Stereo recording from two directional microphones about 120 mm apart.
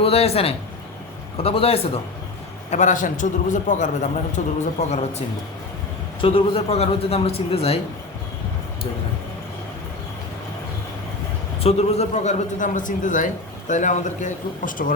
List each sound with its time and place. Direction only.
0.0 s speech: 55° left (ahead or behind)
2.6 s a man's voice: 85° left
6.2 s speech: 50° left (ahead or behind)
11.6 s a man's voice: 60° left (ahead or behind); by 14.9 s 90° left